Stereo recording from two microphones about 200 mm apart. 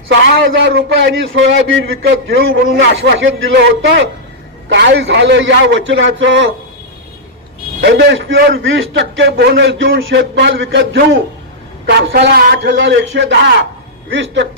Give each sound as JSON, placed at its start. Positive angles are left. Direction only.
{"t": 0.1, "sound": "a man's voice", "side_deg": -60}
{"t": 7.8, "sound": "a man's voice", "side_deg": -60}